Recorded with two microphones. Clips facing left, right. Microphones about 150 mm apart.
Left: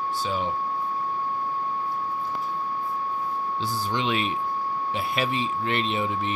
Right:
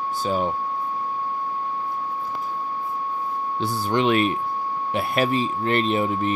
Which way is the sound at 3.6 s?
55° right (ahead or behind).